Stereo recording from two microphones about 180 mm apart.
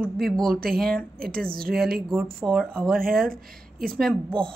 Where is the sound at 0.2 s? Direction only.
Centre (ahead or behind).